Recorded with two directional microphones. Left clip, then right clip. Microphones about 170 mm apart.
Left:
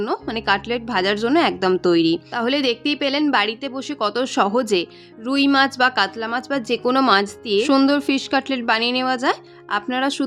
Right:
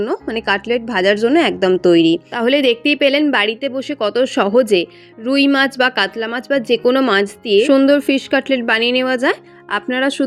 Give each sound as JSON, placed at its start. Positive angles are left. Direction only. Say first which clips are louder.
{"t": 0.0, "sound": "speech", "louder": "right 3 dB", "side_deg": -15}
{"t": 2.0, "sound": "speech", "louder": "right 5 dB", "side_deg": 35}
{"t": 2.3, "sound": "speech", "louder": "right 6 dB", "side_deg": -15}